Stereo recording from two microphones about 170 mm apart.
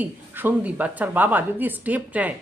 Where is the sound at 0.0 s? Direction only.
10° right (ahead or behind).